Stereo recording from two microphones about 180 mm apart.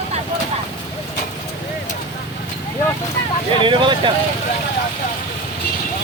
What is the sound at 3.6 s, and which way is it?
Speech, 25° right (ahead or behind).